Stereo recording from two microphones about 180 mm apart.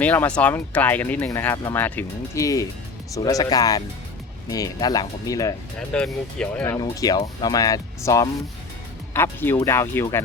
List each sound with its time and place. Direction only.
0.0 s speech: 10° left (ahead or behind)
5.9 s speech: 5° left (ahead or behind)
6.7 s speech: 20° left (ahead or behind)